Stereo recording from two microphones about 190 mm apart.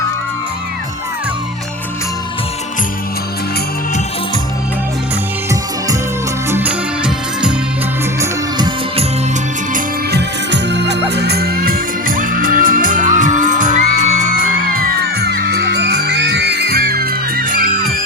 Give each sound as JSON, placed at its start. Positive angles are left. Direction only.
{"t": 6.5, "sound": "music", "side_deg": -10}
{"t": 8.2, "sound": "music", "side_deg": -25}
{"t": 9.7, "sound": "music", "side_deg": -60}